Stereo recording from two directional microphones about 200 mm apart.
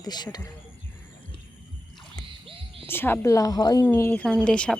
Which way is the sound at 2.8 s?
10° left (ahead or behind).